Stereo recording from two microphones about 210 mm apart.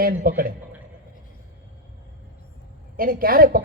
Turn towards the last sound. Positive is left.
turn(degrees=-45)  # may be behind; listen again after turning